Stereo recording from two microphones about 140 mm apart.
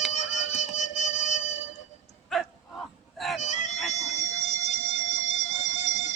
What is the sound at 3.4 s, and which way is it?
Honk, 60° left (ahead or behind).